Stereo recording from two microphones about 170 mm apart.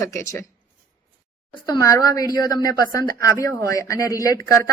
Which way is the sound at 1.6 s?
20° left (ahead or behind).